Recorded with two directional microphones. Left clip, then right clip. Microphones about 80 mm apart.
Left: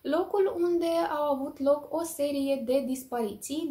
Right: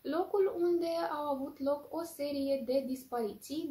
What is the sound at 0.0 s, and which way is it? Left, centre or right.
A woman's voice, left.